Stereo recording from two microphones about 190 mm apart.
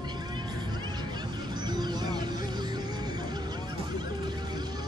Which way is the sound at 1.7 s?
20° right (ahead or behind).